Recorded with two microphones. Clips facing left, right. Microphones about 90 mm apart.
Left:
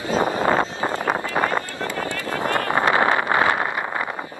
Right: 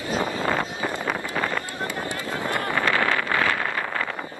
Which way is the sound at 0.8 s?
25° left (ahead or behind).